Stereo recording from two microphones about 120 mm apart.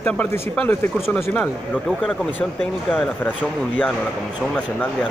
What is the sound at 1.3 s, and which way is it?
Speech, 5° left (ahead or behind).